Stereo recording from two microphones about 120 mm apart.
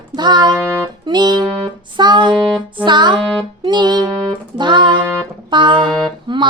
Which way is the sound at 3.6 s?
35° right (ahead or behind).